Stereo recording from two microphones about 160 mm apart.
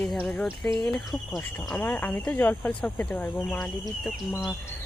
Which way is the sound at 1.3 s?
15° left (ahead or behind).